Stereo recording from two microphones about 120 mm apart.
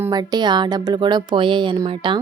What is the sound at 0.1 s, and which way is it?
Speech, 35° right (ahead or behind).